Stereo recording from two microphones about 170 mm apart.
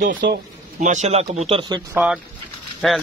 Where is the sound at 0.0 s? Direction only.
50° right (ahead or behind); by 1.8 s 30° right (ahead or behind).